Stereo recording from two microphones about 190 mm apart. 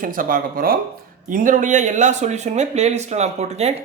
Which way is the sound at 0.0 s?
45° right (ahead or behind).